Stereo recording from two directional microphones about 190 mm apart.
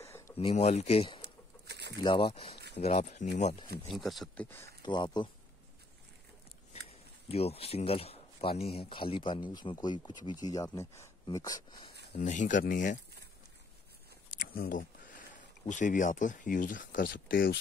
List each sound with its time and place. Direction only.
0.0 s a sound: 15° left (ahead or behind)
0.4 s speech: 35° left (ahead or behind)
1.7 s bird: 60° right (ahead or behind)
2.0 s speech: 25° left (ahead or behind)
3.9 s speech: centre (ahead or behind)
4.5 s speech: 10° left (ahead or behind)
4.8 s speech: 25° left (ahead or behind)
7.2 s speech: 30° left (ahead or behind)
12.1 s speech: 40° left (ahead or behind)
14.4 s a sound: 50° left (ahead or behind)
15.7 s speech: 40° left (ahead or behind)